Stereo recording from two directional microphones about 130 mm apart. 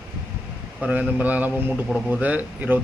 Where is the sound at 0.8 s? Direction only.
10° right (ahead or behind).